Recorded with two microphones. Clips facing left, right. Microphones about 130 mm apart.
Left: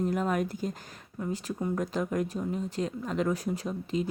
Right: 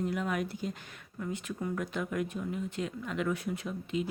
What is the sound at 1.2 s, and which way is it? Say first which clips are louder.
Speech: left 4 dB; 30° left (ahead or behind).